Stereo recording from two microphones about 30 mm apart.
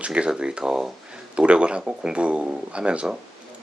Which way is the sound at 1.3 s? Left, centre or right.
Right.